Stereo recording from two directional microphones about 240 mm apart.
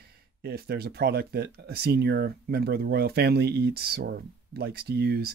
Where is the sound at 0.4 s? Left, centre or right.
Right.